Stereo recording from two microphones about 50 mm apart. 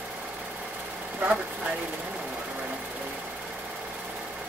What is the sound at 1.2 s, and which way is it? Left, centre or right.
Vehicle, right.